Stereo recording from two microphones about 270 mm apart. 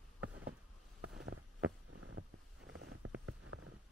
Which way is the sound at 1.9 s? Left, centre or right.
Right.